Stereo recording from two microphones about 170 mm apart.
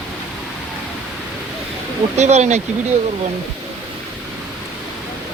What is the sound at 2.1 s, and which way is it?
Speech, 40° right (ahead or behind).